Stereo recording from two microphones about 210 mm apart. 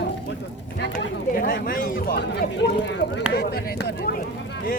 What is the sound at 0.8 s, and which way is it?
Speech, 50° left (ahead or behind).